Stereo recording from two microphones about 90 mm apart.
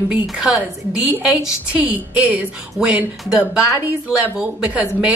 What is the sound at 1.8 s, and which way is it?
A woman's voice, 15° right (ahead or behind).